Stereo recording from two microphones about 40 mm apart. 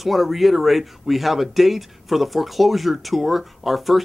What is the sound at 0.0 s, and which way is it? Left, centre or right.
Speech, centre.